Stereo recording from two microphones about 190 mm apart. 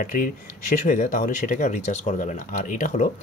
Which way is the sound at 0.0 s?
45° left (ahead or behind).